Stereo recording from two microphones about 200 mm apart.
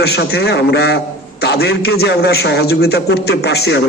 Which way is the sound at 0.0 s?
55° left (ahead or behind).